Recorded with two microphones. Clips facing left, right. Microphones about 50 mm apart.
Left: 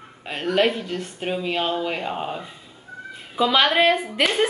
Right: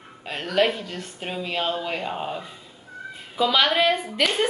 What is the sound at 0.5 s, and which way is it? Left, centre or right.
A woman's voice, centre.